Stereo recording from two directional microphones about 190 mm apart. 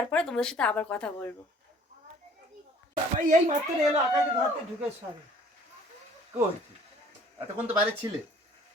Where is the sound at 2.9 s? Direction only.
45° right (ahead or behind).